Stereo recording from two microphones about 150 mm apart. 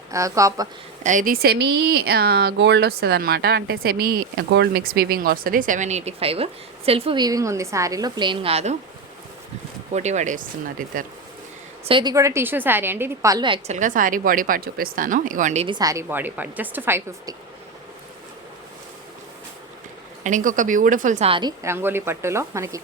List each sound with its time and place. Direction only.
0.1 s a woman's voice: 20° right (ahead or behind)
1.0 s speech: 65° right (ahead or behind); by 7.2 s 40° right (ahead or behind)
7.2 s a woman's voice: 25° right (ahead or behind); by 8.7 s 40° right (ahead or behind)
9.9 s speech: 50° right (ahead or behind)
11.9 s a woman's voice: 35° right (ahead or behind)
12.1 s a woman's voice: 20° right (ahead or behind)
13.5 s a woman's voice: 50° right (ahead or behind)
15.6 s a woman's voice: 25° right (ahead or behind)
20.2 s a woman's voice: 60° right (ahead or behind)
21.2 s a woman's voice: 35° right (ahead or behind)
21.6 s a woman's voice: 15° right (ahead or behind)